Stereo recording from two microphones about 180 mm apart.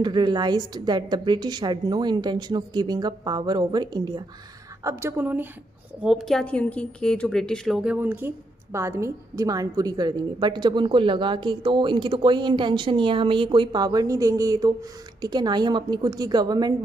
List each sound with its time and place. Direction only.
0.0 s a woman's voice: 25° right (ahead or behind)